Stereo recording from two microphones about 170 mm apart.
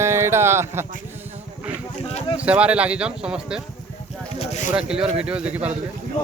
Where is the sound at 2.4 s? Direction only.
10° right (ahead or behind).